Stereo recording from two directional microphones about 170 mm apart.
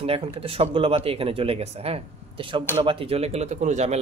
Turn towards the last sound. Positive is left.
turn(degrees=-40)  # may be behind; listen again after turning